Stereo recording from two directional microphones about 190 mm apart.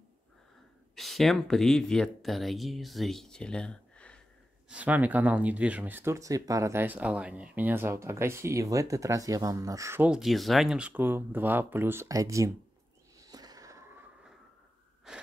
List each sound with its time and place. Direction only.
0.9 s speech: centre (ahead or behind)
4.6 s speech: 5° right (ahead or behind)
13.2 s a sound: 20° right (ahead or behind)
15.1 s wheeze: 5° right (ahead or behind)